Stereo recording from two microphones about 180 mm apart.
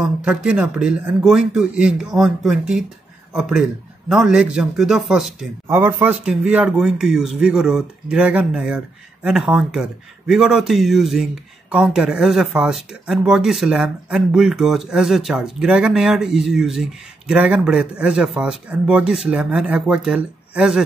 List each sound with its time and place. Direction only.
0.0 s speech: 5° right (ahead or behind)